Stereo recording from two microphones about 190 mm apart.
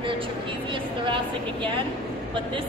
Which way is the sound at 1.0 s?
25° right (ahead or behind).